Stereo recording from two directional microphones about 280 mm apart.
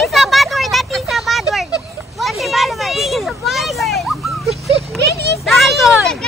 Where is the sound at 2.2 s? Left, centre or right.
Centre.